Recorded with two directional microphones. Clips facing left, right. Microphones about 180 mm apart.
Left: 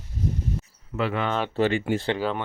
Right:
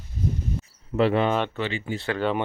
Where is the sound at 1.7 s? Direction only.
55° left (ahead or behind).